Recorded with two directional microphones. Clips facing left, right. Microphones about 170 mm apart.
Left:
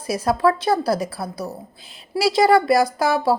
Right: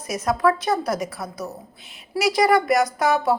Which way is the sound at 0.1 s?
30° left (ahead or behind).